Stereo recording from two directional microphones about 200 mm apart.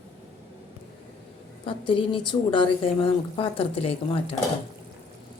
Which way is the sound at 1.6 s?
25° left (ahead or behind).